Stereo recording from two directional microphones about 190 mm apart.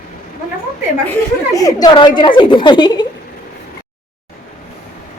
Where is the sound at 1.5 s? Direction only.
20° left (ahead or behind).